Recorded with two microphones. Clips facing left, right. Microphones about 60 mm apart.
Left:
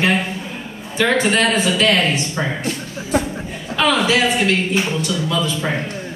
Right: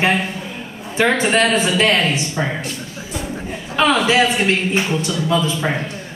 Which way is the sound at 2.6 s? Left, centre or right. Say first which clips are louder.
Left 3 dB; left.